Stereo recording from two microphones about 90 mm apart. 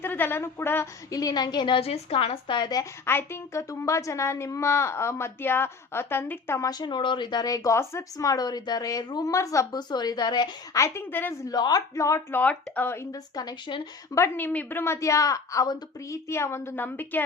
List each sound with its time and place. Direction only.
0.0 s a woman's voice: 20° left (ahead or behind)
1.1 s a woman's voice: 45° left (ahead or behind); by 2.6 s 90° left
2.6 s speech: 50° left (ahead or behind)
3.1 s a woman's voice: 25° left (ahead or behind)
6.6 s speech: 45° left (ahead or behind)
9.7 s speech: 50° left (ahead or behind)
10.8 s a woman's voice: 35° left (ahead or behind)
11.1 s a woman's voice: 25° left (ahead or behind)
11.4 s speech: 50° left (ahead or behind)
12.3 s a woman's voice: 20° left (ahead or behind)
13.1 s speech: 45° left (ahead or behind)
14.3 s a woman's voice: 20° left (ahead or behind)